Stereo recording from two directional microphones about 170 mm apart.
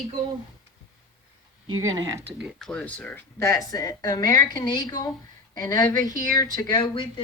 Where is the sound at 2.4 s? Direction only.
Centre (ahead or behind); by 7.0 s 25° left (ahead or behind).